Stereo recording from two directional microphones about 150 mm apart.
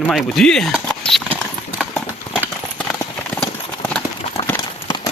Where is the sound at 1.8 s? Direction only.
Centre (ahead or behind).